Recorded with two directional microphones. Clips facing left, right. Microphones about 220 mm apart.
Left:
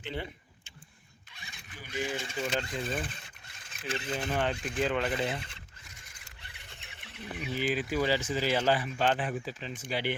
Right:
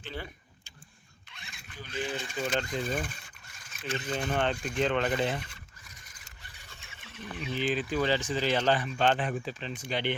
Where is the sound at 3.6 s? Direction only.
30° left (ahead or behind).